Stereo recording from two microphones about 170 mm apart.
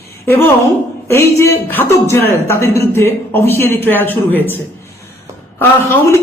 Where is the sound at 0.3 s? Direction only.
15° left (ahead or behind).